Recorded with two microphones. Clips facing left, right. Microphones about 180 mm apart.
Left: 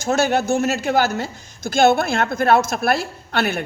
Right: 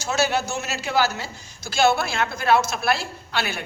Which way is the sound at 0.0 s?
50° left (ahead or behind).